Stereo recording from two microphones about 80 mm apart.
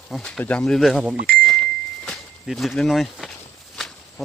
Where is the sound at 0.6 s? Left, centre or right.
Centre.